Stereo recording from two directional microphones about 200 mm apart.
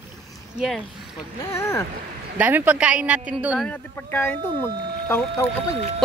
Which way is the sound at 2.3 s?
10° right (ahead or behind).